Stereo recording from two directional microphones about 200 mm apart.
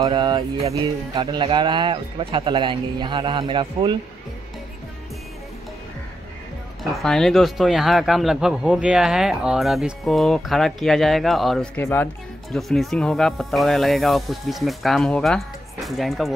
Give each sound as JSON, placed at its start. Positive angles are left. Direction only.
{"t": 0.0, "sound": "speech", "side_deg": -20}
{"t": 6.8, "sound": "speech", "side_deg": 0}